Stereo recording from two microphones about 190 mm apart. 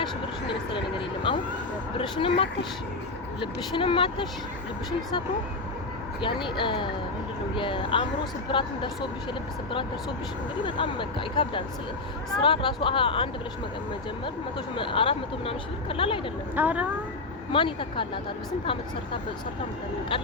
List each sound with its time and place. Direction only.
1.3 s speech: 25° left (ahead or behind)
6.2 s speech: 25° left (ahead or behind)
10.6 s speech: 25° left (ahead or behind)
14.8 s speech: 25° left (ahead or behind)
16.6 s speech: 10° right (ahead or behind)
17.5 s speech: 25° left (ahead or behind)